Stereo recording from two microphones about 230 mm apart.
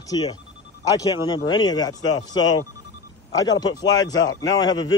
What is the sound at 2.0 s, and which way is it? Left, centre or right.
Speech, left.